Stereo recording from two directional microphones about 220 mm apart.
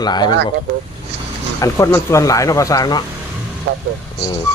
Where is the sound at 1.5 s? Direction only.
15° left (ahead or behind).